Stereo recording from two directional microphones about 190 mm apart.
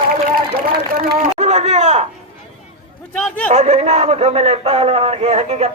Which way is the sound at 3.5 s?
35° right (ahead or behind).